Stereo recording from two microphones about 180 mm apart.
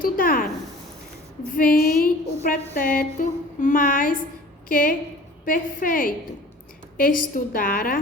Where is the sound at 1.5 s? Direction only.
50° left (ahead or behind).